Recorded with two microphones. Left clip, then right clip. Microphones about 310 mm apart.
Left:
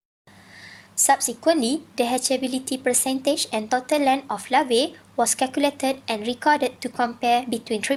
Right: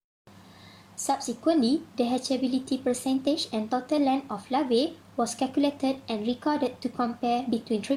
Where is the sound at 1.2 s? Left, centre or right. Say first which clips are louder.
Left 4 dB; left.